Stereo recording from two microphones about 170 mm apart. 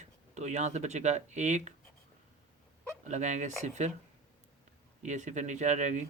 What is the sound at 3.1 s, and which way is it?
Speech, 45° right (ahead or behind).